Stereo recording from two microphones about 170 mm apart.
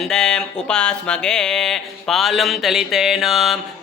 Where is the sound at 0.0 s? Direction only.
5° left (ahead or behind).